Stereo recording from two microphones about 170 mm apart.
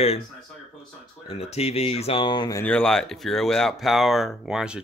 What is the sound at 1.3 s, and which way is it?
Speech, 35° left (ahead or behind).